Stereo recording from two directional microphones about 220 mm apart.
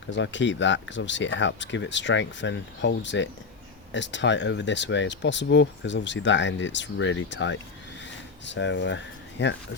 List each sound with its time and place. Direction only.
0.1 s speech: 55° left (ahead or behind)